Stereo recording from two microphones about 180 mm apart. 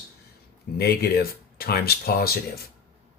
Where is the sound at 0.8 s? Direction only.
60° left (ahead or behind).